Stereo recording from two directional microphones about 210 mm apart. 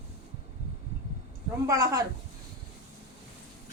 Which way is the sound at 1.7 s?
15° right (ahead or behind).